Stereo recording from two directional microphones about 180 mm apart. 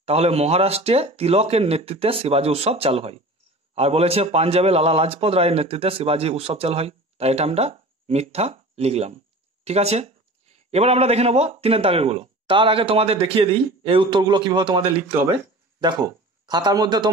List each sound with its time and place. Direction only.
0.0 s a man's voice: 35° right (ahead or behind)
16.4 s speech: 25° right (ahead or behind)